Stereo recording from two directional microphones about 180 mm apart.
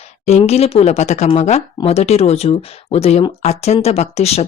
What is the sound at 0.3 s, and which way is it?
Speech, 35° left (ahead or behind).